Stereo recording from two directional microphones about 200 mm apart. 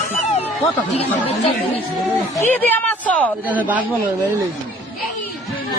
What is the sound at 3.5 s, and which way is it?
Speech, 10° right (ahead or behind).